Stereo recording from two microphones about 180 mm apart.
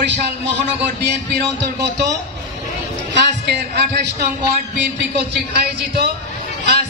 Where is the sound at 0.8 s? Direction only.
65° right (ahead or behind).